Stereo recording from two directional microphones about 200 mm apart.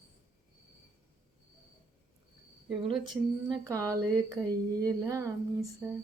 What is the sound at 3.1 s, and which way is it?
Speech, centre (ahead or behind).